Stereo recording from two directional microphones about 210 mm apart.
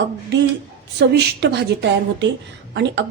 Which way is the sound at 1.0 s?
55° right (ahead or behind).